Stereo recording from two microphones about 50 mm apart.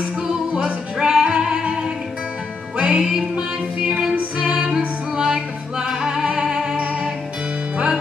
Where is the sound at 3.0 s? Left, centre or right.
Centre.